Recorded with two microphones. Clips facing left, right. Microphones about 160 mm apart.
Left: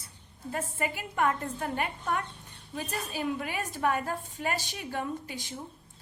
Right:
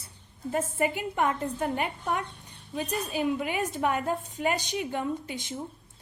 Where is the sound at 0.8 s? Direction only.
20° right (ahead or behind).